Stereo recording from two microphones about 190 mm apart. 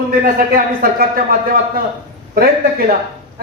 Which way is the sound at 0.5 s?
50° right (ahead or behind).